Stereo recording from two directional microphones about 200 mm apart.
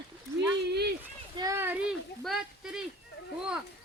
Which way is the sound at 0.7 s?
55° right (ahead or behind).